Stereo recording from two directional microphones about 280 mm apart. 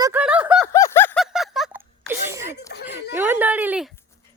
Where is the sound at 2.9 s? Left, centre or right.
Centre.